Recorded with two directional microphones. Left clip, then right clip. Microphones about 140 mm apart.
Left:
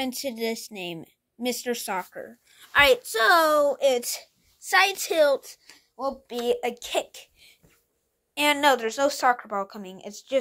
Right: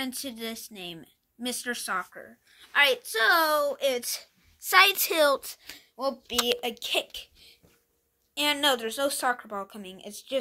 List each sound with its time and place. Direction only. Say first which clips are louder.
0.0 s a woman's voice: left 6 dB; 30° left (ahead or behind)
4.6 s a woman's voice: right 1 dB; 15° right (ahead or behind)
5.6 s speech: right 6 dB; 35° right (ahead or behind)
6.2 s speech: right 2 dB; 5° right (ahead or behind)
6.6 s a woman's voice: left 2 dB; 10° left (ahead or behind)
7.2 s babbling: right 5 dB; 20° left (ahead or behind)
8.4 s a woman's voice: left 4 dB; 20° left (ahead or behind)
8.6 s a woman's voice: left 4 dB; 10° left (ahead or behind)